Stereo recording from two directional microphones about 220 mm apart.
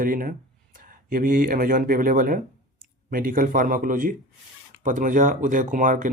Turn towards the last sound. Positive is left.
turn(degrees=-35)  # may be behind; listen again after turning